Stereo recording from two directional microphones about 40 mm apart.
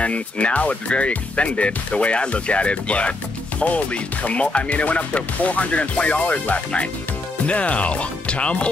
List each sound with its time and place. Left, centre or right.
0.0 s speech: left